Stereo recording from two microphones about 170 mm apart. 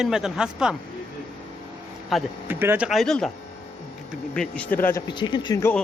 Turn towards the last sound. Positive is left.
turn(degrees=20)  # may be behind; listen again after turning